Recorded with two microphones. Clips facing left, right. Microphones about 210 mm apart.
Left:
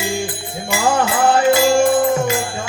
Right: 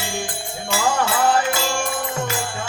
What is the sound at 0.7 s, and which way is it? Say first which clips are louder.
Music: left 4 dB; 15° left (ahead or behind).